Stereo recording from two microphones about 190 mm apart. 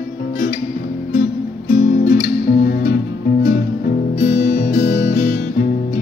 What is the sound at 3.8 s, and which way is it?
Music, 40° left (ahead or behind).